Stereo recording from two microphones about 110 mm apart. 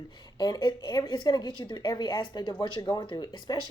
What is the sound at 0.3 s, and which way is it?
A woman's voice, 35° left (ahead or behind).